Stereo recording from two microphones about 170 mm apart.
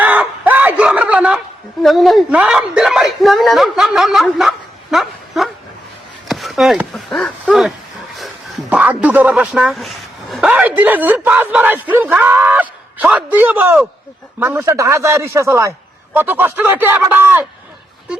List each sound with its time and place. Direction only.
0.0 s a sound: 10° right (ahead or behind)
1.8 s a woman's voice: centre (ahead or behind)
8.7 s speech: 5° right (ahead or behind)